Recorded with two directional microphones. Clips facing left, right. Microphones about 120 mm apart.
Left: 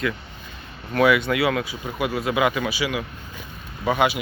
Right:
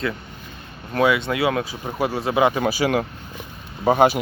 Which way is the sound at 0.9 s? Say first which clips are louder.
Left 1 dB; 25° right (ahead or behind).